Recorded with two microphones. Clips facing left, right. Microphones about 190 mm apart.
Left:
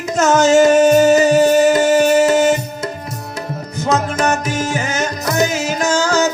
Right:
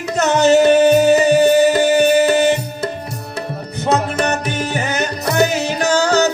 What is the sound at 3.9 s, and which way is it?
Music, 65° right (ahead or behind).